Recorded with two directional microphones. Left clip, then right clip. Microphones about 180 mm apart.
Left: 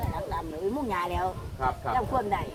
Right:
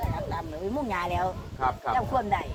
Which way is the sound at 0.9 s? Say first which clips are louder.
Right 3 dB; 20° right (ahead or behind).